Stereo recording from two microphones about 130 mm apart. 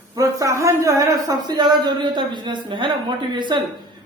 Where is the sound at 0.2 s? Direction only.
25° right (ahead or behind).